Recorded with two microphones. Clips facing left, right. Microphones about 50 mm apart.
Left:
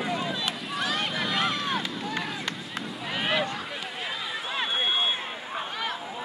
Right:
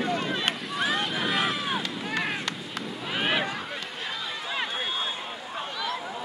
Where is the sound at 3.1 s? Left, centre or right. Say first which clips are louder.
Even; centre.